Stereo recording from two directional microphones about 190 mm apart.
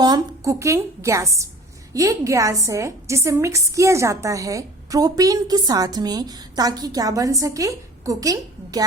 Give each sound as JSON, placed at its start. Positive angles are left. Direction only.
{"t": 0.0, "sound": "a woman's voice", "side_deg": -20}